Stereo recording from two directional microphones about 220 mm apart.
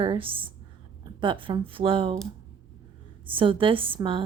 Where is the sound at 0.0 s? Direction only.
25° right (ahead or behind).